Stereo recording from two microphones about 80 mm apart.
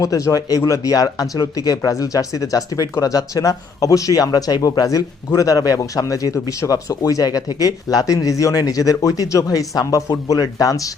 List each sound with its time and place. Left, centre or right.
0.0 s speech: left